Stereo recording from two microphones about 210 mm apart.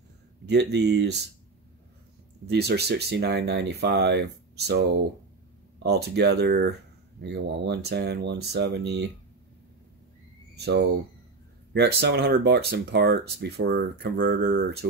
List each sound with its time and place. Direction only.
0.5 s speech: 55° right (ahead or behind)
2.4 s speech: 50° right (ahead or behind)
10.5 s speech: 50° right (ahead or behind)